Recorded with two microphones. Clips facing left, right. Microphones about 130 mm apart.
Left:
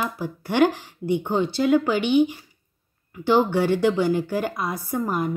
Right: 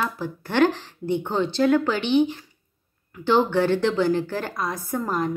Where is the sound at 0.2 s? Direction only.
10° left (ahead or behind).